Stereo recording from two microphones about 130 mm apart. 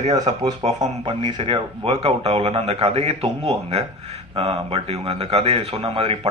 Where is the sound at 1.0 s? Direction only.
35° right (ahead or behind).